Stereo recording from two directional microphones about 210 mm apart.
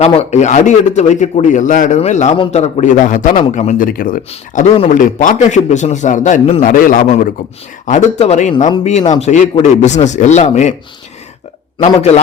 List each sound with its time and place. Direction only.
0.0 s a man's voice: 30° left (ahead or behind)
4.3 s a man's voice: 30° left (ahead or behind)
11.9 s a man's voice: 30° left (ahead or behind)